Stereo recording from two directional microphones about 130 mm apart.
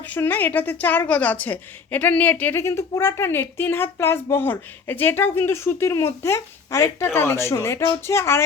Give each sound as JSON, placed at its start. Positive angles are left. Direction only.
{"t": 0.0, "sound": "a woman's voice", "side_deg": 15}